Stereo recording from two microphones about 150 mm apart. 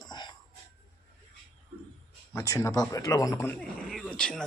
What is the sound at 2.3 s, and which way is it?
Speech, 20° left (ahead or behind).